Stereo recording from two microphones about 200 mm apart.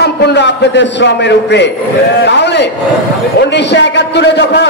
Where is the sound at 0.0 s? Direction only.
55° left (ahead or behind).